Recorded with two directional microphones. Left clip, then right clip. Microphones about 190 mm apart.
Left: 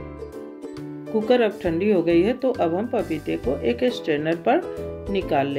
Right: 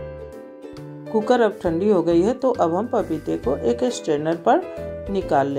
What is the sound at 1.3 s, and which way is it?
Speech, 15° right (ahead or behind).